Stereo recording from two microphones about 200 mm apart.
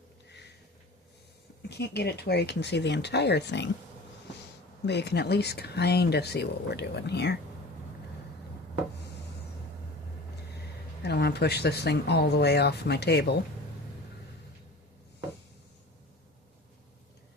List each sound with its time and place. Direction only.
1.7 s speech: 55° left (ahead or behind)
4.9 s speech: 55° left (ahead or behind)
11.0 s speech: 55° left (ahead or behind)